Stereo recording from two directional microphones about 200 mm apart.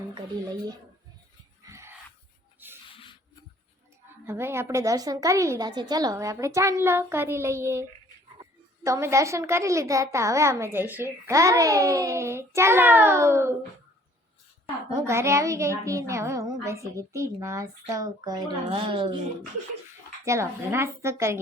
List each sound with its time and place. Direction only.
0.4 s speech: 20° right (ahead or behind)
1.6 s a sound: 15° right (ahead or behind)
2.9 s rub: 25° left (ahead or behind)
4.3 s a woman's voice: 10° right (ahead or behind)
14.9 s a woman's voice: 15° right (ahead or behind)
20.2 s a woman's voice: 15° right (ahead or behind)